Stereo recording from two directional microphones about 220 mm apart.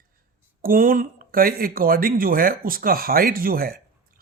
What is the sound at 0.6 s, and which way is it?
Speech, 40° right (ahead or behind).